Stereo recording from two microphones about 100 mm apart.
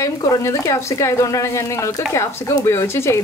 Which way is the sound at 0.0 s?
30° left (ahead or behind).